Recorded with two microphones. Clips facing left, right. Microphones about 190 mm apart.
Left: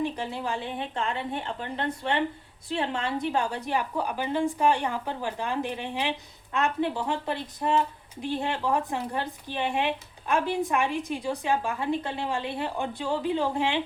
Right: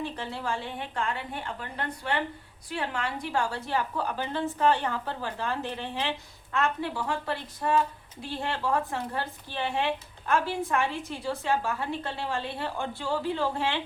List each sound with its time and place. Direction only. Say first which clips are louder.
0.0 s a woman's voice: left 4 dB; 15° left (ahead or behind)